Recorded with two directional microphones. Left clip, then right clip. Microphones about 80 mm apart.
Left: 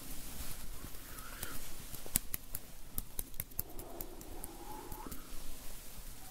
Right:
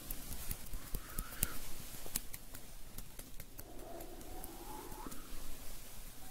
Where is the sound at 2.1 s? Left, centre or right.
Right.